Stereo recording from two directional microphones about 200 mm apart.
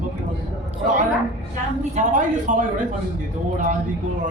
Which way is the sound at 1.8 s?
40° right (ahead or behind).